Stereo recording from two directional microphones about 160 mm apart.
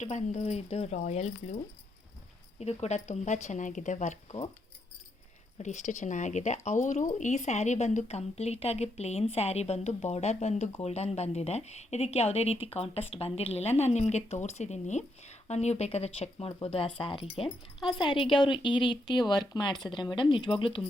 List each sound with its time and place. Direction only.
0.0 s speech: 50° left (ahead or behind)
5.5 s a woman's voice: 50° left (ahead or behind)
17.7 s speech: centre (ahead or behind)
18.0 s a woman's voice: 30° left (ahead or behind)